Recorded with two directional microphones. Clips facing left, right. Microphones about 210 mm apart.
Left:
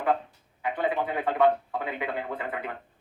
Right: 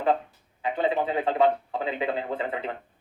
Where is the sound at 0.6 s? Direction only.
25° right (ahead or behind).